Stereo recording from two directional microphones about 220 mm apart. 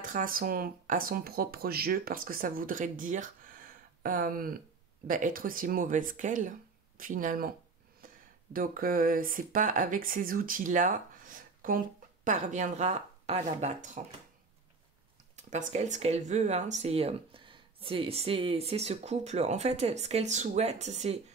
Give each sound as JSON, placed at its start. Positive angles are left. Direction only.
{"t": 0.0, "sound": "speech", "side_deg": -40}
{"t": 8.5, "sound": "speech", "side_deg": -40}
{"t": 15.3, "sound": "speech", "side_deg": -30}